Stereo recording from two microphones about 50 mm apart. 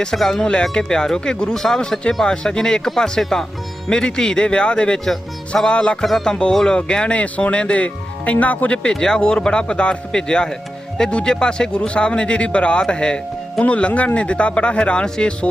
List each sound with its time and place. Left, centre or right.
0.0 s speech: centre
6.0 s music: centre
6.2 s speech: centre
8.9 s speech: centre